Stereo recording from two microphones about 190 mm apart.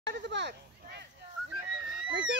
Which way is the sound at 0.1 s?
65° right (ahead or behind).